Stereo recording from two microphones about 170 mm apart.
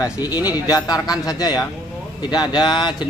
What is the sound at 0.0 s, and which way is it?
A man's voice, 20° left (ahead or behind).